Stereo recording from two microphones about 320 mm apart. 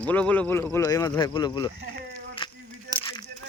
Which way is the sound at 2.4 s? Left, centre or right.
Centre.